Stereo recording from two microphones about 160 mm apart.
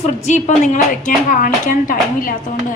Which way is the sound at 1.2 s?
55° left (ahead or behind).